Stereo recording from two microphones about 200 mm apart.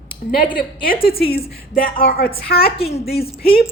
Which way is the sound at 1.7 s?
45° left (ahead or behind).